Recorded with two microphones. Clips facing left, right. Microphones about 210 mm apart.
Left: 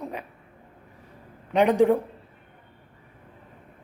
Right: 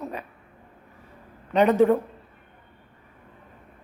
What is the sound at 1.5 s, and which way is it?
Speech, 10° left (ahead or behind).